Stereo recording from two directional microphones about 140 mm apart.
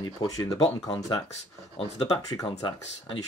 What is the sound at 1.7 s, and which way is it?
Speech, 40° left (ahead or behind).